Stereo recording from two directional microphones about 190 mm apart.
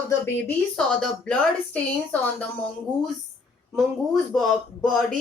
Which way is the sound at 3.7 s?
Centre (ahead or behind).